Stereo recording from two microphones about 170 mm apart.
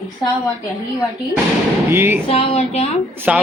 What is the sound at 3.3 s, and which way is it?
Speech, 5° right (ahead or behind).